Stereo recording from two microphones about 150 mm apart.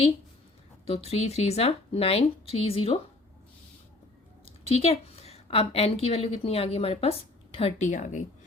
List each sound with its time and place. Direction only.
0.9 s speech: 45° left (ahead or behind)
4.4 s a woman's voice: 40° left (ahead or behind)
7.9 s speech: 55° left (ahead or behind)